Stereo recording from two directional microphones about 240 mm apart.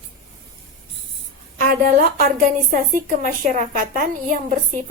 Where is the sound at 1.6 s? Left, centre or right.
Right.